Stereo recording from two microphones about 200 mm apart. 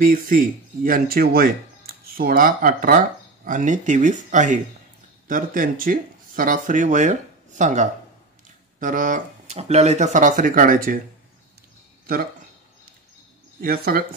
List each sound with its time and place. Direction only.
0.0 s speech: 45° right (ahead or behind)
13.6 s speech: 50° right (ahead or behind)